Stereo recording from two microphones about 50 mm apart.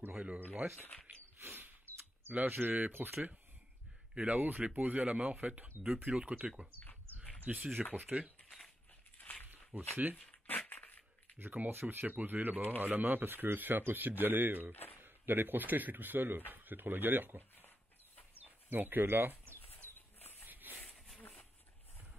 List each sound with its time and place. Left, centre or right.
0.1 s speech: right
1.5 s a sound: right
2.3 s speech: right
4.1 s speech: right
4.4 s speech: right
6.7 s a sound: left
7.4 s speech: right
9.2 s walk: left
9.7 s speech: right
10.7 s crushing: left
11.3 s speech: right
18.4 s bird: right
20.4 s a sound: right
20.8 s a sound: centre